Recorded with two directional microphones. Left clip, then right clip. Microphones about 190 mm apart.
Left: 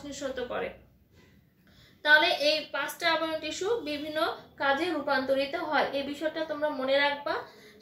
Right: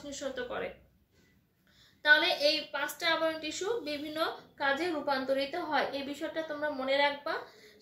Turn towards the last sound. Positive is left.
turn(degrees=-25)  # may be behind; listen again after turning